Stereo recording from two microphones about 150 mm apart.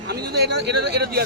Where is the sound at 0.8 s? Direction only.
90° right.